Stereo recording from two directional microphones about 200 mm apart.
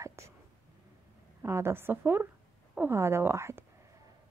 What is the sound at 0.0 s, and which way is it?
Whispering, 15° right (ahead or behind).